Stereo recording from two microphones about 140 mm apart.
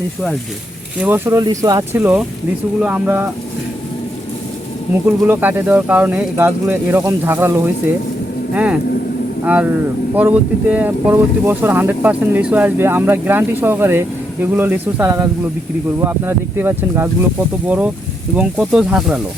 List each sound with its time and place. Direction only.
0.9 s speech: 15° right (ahead or behind)
1.4 s speech: 30° right (ahead or behind)
1.9 s speech: 15° right (ahead or behind)
5.0 s speech: 15° right (ahead or behind)